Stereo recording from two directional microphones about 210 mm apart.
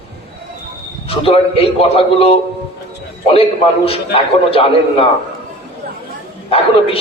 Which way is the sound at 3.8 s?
25° left (ahead or behind).